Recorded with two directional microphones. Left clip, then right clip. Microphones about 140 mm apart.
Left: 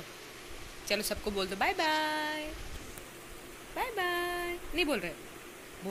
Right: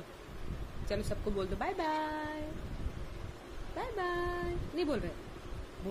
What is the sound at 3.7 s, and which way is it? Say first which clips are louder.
Speech: left 4 dB; 10° right (ahead or behind).